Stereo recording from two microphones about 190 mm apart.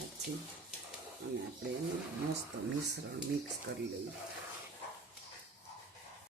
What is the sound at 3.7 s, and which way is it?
Speech, 60° right (ahead or behind).